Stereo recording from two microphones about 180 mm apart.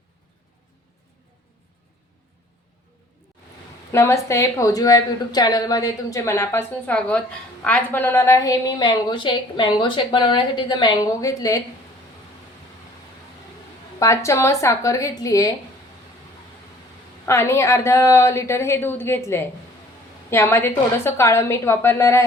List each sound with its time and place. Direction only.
3.9 s a woman's voice: 15° left (ahead or behind)
14.0 s a woman's voice: 15° left (ahead or behind)
17.2 s a woman's voice: 15° left (ahead or behind)